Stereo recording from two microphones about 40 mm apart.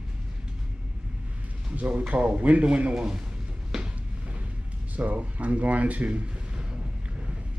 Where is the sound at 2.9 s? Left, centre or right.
Centre.